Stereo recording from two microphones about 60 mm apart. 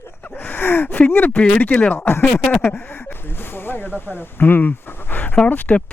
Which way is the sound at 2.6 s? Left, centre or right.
Left.